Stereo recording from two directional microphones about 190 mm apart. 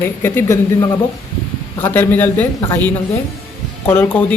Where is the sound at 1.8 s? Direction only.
10° left (ahead or behind).